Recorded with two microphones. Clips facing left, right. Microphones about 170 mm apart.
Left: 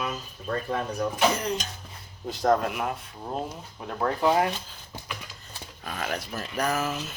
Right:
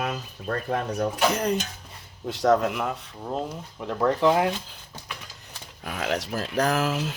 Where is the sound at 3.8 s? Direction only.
80° right.